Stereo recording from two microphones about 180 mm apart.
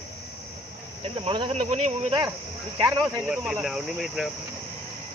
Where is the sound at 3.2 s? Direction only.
5° right (ahead or behind).